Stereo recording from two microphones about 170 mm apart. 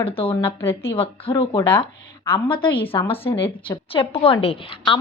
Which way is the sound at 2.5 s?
30° left (ahead or behind).